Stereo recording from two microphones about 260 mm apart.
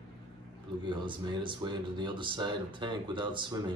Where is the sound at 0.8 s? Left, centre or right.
Centre.